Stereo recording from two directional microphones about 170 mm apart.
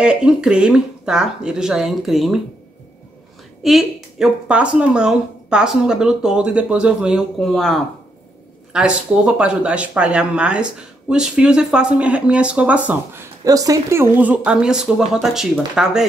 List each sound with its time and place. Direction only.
0.0 s speech: 5° right (ahead or behind)
3.6 s speech: centre (ahead or behind)